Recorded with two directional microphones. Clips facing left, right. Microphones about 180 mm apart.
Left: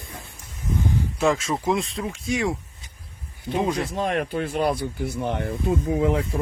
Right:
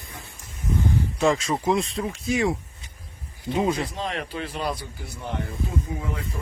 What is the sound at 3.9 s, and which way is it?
Speech, 50° left (ahead or behind).